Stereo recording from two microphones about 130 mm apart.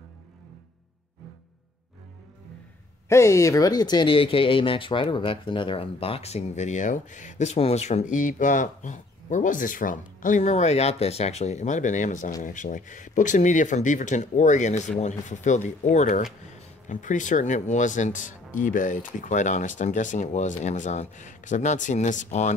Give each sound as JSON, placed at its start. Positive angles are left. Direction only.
{"t": 3.1, "sound": "speech", "side_deg": 25}